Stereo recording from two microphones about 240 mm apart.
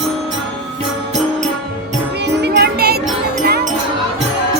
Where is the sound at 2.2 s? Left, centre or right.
Right.